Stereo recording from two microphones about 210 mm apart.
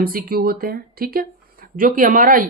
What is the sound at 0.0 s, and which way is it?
Speech, 45° right (ahead or behind).